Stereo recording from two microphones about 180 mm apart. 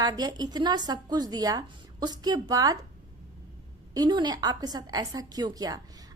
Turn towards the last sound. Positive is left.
turn(degrees=-20)  # may be behind; listen again after turning